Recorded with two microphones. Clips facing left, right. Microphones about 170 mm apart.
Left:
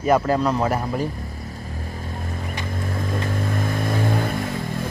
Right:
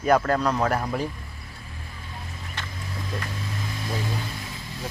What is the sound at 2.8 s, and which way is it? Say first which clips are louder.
Vehicle: left 7 dB; 50° left (ahead or behind).